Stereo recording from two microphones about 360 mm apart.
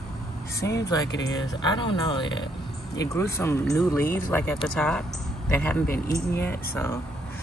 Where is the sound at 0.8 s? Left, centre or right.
Centre.